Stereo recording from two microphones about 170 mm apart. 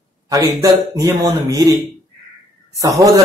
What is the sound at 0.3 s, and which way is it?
A man's voice, 20° right (ahead or behind).